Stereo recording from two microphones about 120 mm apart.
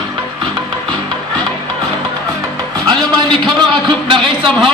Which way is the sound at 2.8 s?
40° right (ahead or behind).